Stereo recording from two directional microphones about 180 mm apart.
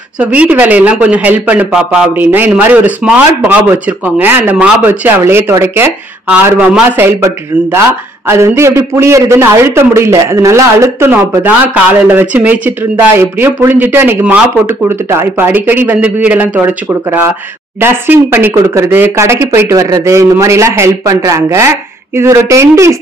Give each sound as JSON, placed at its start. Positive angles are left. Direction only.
{"t": 0.2, "sound": "a man's voice", "side_deg": -10}